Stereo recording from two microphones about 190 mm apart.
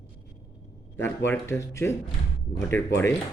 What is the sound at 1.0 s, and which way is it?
Speech, 15° left (ahead or behind).